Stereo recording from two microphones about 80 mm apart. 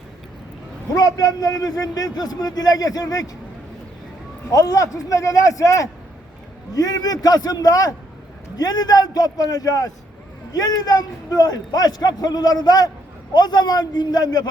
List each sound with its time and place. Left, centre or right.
0.9 s a man's voice: left
4.5 s a man's voice: left